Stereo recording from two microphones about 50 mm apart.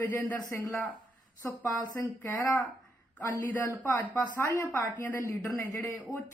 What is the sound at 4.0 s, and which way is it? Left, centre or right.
Speech, left.